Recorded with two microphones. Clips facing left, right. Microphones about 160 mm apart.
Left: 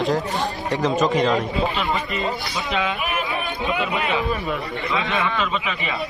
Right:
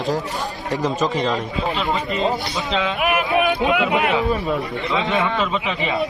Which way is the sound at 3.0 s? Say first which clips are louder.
Right 7 dB; 70° right (ahead or behind).